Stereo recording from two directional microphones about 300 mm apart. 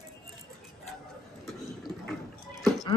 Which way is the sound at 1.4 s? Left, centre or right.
Centre.